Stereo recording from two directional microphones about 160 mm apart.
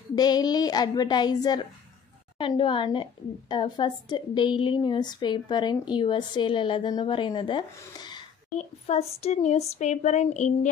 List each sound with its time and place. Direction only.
0.1 s a woman's voice: 25° left (ahead or behind)
8.5 s speech: 45° left (ahead or behind)